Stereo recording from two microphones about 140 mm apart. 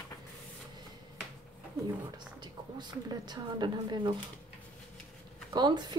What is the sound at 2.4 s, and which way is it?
A woman's voice, 30° right (ahead or behind).